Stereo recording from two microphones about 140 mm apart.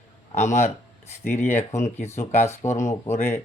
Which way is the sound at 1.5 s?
55° left (ahead or behind).